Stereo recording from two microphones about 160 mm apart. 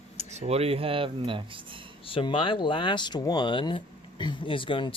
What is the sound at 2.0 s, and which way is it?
Speech, 35° left (ahead or behind).